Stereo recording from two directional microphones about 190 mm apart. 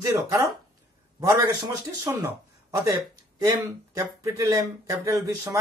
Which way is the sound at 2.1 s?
20° right (ahead or behind).